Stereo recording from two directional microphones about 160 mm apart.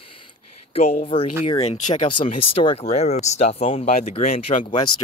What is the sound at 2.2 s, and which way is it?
Speech, 35° left (ahead or behind).